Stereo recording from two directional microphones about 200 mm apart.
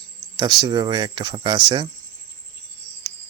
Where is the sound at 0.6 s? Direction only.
20° right (ahead or behind).